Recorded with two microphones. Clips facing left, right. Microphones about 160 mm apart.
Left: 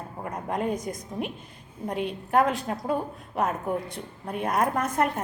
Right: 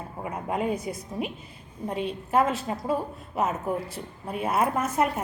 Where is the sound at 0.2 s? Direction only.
5° right (ahead or behind).